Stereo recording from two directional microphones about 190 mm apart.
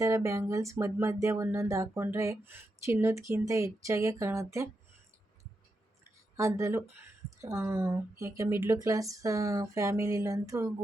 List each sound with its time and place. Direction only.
0.0 s speech: 15° right (ahead or behind)
6.3 s speech: 15° right (ahead or behind)